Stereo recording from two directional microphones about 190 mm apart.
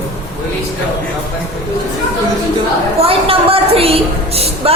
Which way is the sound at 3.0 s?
30° right (ahead or behind).